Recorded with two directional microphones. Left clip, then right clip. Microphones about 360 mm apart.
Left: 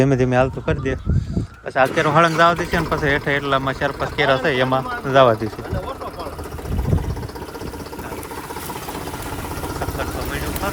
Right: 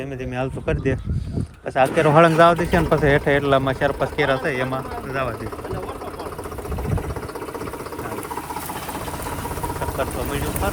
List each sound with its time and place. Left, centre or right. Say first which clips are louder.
0.0 s speech: left 13 dB; left
0.3 s speech: left 7 dB; centre
10.0 s speech: right 1 dB; centre